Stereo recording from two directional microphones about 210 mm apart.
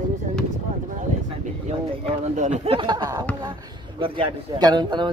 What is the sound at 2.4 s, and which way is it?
A man's voice, 30° right (ahead or behind).